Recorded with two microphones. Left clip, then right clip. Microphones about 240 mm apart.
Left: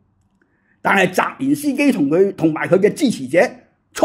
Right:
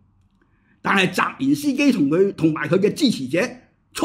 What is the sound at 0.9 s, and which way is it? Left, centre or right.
Speech, centre.